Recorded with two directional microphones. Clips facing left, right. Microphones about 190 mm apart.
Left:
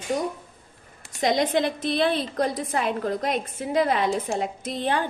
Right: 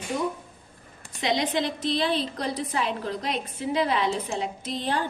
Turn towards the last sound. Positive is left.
turn(degrees=55)  # may be behind; listen again after turning